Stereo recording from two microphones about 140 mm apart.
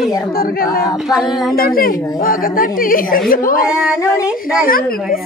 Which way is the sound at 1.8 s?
90° left.